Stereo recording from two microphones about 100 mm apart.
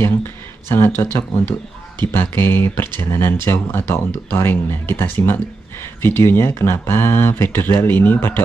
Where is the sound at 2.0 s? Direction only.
25° left (ahead or behind).